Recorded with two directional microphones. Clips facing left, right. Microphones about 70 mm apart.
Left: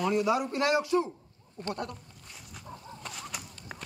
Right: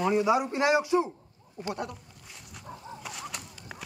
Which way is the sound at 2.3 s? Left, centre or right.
Centre.